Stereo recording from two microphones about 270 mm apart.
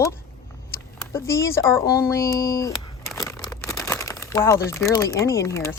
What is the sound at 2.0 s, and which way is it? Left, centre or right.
Speech, centre.